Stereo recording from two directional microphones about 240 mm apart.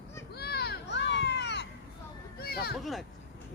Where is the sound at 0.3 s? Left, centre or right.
Left.